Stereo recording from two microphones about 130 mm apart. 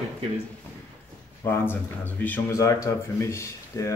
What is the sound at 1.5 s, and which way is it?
Speech, 15° left (ahead or behind).